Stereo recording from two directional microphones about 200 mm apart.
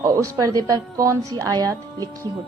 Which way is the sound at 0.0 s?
15° right (ahead or behind).